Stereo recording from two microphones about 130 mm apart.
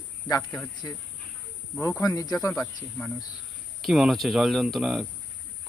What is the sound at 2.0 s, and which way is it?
Speech, 30° left (ahead or behind).